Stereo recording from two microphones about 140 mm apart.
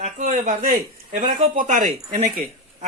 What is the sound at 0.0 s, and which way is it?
Speech, 60° right (ahead or behind).